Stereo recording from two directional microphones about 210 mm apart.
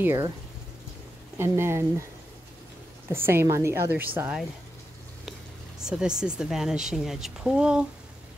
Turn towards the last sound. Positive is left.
turn(degrees=-5)  # may be behind; listen again after turning